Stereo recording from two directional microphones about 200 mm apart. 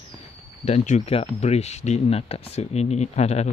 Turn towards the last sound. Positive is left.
turn(degrees=35)  # may be behind; listen again after turning